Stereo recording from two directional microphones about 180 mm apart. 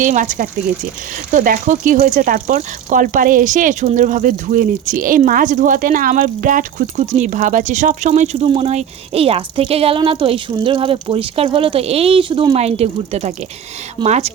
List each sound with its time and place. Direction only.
0.0 s speech: 45° right (ahead or behind)